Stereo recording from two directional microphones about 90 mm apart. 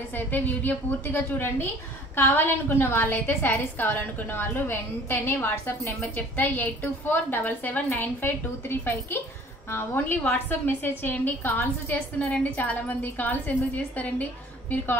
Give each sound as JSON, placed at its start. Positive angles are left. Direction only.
{"t": 0.1, "sound": "a woman's voice", "side_deg": 20}